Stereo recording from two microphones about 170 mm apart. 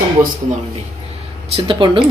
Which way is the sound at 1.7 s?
30° right (ahead or behind).